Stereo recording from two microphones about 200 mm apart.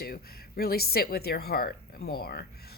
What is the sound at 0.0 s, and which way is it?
A woman's voice, 50° left (ahead or behind).